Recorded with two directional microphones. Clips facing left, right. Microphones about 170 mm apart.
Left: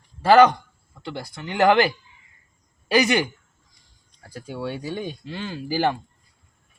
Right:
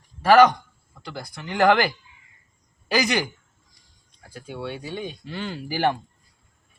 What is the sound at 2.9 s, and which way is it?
Speech, 25° left (ahead or behind).